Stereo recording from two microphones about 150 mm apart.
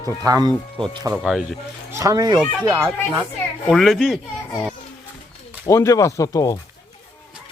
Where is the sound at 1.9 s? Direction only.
20° right (ahead or behind).